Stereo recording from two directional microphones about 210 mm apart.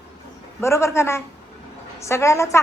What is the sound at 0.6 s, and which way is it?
A woman's voice, 15° left (ahead or behind).